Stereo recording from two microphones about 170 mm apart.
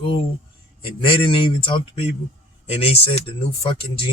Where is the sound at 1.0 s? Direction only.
30° left (ahead or behind).